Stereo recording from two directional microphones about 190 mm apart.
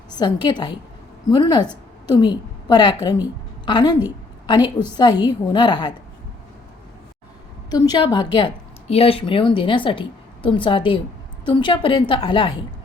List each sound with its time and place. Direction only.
0.1 s a woman's voice: 25° left (ahead or behind)
7.7 s a woman's voice: 25° left (ahead or behind)